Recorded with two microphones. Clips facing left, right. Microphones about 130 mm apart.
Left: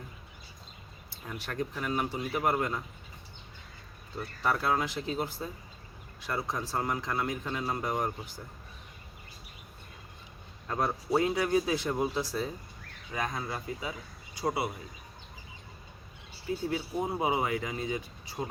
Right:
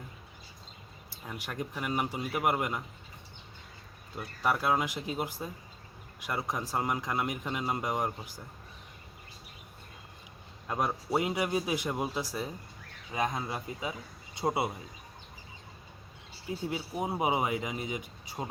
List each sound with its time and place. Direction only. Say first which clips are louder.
1.3 s speech: left 2 dB; 10° right (ahead or behind)
4.2 s speech: even; 10° right (ahead or behind)
10.7 s speech: left 1 dB; 15° right (ahead or behind)
16.6 s speech: left 1 dB; 15° right (ahead or behind)